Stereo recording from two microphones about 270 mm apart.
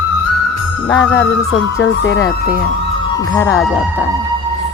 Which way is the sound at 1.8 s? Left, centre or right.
Left.